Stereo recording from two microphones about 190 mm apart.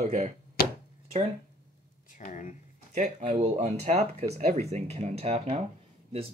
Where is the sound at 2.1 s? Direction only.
40° left (ahead or behind).